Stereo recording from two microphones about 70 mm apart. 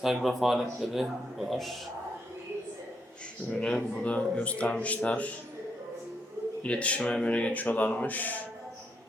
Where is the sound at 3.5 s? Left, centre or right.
Centre.